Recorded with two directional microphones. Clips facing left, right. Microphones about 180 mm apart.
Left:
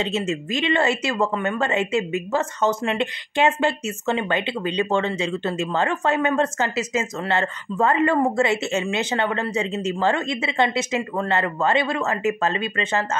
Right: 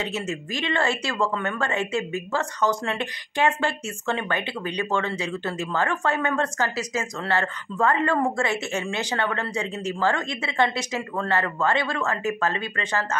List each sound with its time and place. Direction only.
0.3 s speech: 20° left (ahead or behind)